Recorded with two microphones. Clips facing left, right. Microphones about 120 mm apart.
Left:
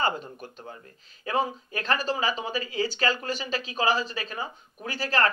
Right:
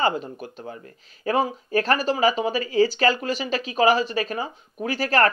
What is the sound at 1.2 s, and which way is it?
Speech, 40° right (ahead or behind).